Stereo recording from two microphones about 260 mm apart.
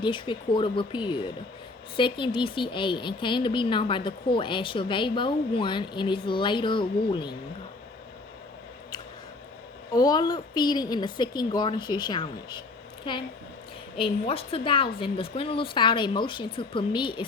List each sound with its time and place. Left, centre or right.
0.0 s speech: centre
9.9 s a woman's voice: centre